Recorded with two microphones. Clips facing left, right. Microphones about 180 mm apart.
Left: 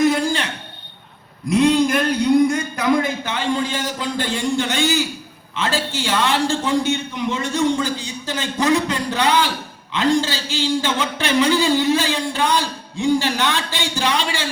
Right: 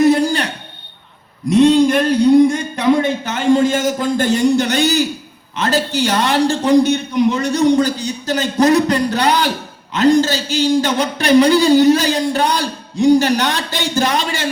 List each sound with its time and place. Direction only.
0.0 s a sound: 35° right (ahead or behind)
1.5 s a man's voice: 35° right (ahead or behind)
3.2 s a man's voice: 45° right (ahead or behind)